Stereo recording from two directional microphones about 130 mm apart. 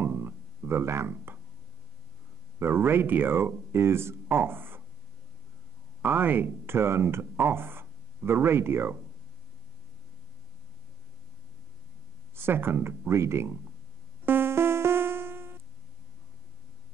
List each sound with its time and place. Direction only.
0.0 s music: 15° right (ahead or behind)
2.6 s speech: 15° right (ahead or behind)
6.0 s speech: 15° right (ahead or behind)
12.4 s speech: 15° right (ahead or behind)
14.2 s music: 15° right (ahead or behind)